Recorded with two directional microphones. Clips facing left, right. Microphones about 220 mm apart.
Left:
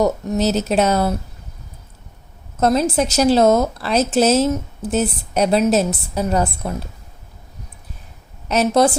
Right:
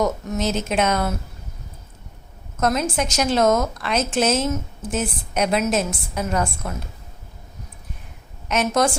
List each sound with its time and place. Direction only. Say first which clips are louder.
0.0 s a woman's voice: left 5 dB; 35° left (ahead or behind)
2.6 s a woman's voice: left 5 dB; 30° left (ahead or behind)
8.4 s a woman's voice: left 5 dB; 35° left (ahead or behind)